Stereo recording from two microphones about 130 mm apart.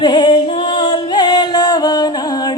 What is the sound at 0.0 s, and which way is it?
Music, 35° left (ahead or behind).